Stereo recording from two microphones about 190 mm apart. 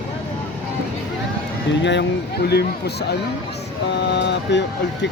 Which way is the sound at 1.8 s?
65° left (ahead or behind).